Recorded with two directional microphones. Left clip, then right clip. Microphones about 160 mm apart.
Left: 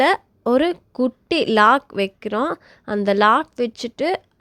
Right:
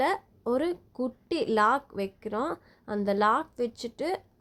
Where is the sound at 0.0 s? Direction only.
35° left (ahead or behind).